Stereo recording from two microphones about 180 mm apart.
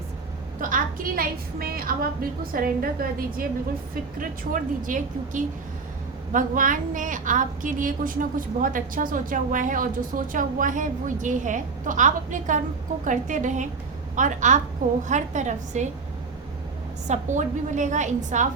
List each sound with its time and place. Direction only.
0.6 s a woman's voice: 50° right (ahead or behind)
17.1 s a woman's voice: 40° right (ahead or behind)